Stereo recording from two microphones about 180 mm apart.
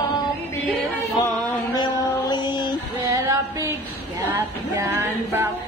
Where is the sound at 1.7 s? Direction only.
25° left (ahead or behind).